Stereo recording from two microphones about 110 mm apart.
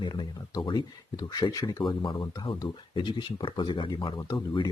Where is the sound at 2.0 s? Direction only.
45° left (ahead or behind).